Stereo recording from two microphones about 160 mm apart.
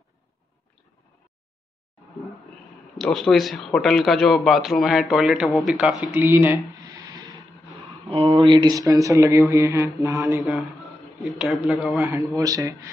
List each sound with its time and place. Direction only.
3.0 s speech: centre (ahead or behind); by 10.4 s 20° right (ahead or behind)
11.3 s speech: 5° right (ahead or behind)
12.4 s speech: 20° right (ahead or behind)